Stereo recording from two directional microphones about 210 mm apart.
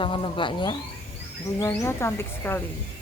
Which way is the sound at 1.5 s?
10° left (ahead or behind).